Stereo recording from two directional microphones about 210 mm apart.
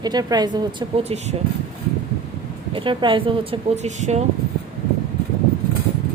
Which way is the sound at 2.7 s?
25° right (ahead or behind).